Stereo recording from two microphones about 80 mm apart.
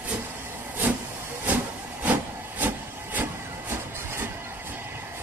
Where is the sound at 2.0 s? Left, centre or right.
Right.